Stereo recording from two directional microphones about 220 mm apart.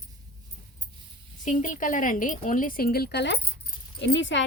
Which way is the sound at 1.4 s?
35° left (ahead or behind).